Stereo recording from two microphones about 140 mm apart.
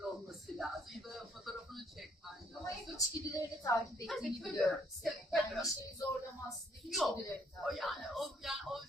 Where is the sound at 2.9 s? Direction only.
25° left (ahead or behind).